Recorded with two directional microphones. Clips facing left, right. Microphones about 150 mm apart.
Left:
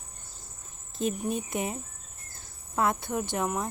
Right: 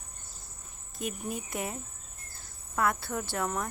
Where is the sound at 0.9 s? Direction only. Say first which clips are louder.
Left 6 dB; 25° left (ahead or behind).